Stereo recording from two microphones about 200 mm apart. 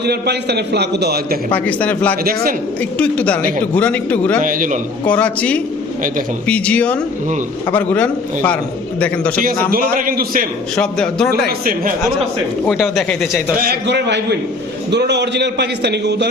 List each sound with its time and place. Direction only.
0.0 s a man's voice: 55° right (ahead or behind)
1.5 s a man's voice: 5° left (ahead or behind)
2.2 s a man's voice: 45° right (ahead or behind)
3.0 s a man's voice: 5° left (ahead or behind)
4.4 s a man's voice: 40° right (ahead or behind)
5.0 s a man's voice: 5° left (ahead or behind)
9.4 s a man's voice: 45° right (ahead or behind)
10.8 s speech: 5° left (ahead or behind)
11.3 s a man's voice: 45° right (ahead or behind)
12.6 s speech: centre (ahead or behind)
13.6 s a man's voice: 55° right (ahead or behind)